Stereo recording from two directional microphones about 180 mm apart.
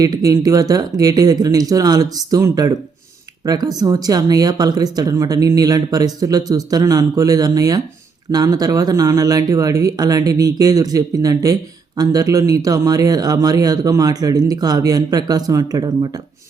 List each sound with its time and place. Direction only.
0.0 s speech: 20° right (ahead or behind)